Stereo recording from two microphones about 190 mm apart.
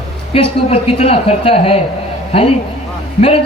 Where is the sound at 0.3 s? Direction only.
30° left (ahead or behind).